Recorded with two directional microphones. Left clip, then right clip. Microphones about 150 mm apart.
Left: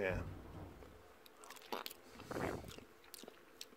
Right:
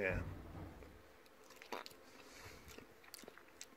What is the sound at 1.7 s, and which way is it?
Biting, 35° left (ahead or behind).